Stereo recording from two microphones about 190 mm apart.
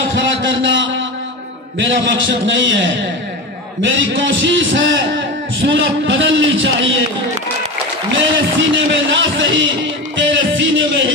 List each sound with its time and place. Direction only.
0.1 s a sound: 75° right (ahead or behind)
1.8 s a man's voice: 80° right
5.6 s a man's voice: 90° right
8.1 s speech: 80° right